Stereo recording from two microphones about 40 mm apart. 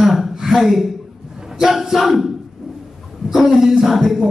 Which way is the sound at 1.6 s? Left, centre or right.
Centre.